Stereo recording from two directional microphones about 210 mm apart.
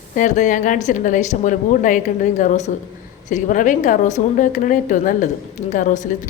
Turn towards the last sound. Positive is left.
turn(degrees=35)  # may be behind; listen again after turning